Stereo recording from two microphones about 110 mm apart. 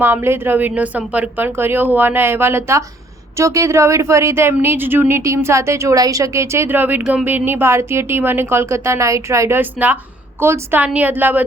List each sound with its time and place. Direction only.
0.0 s a woman's voice: 20° right (ahead or behind)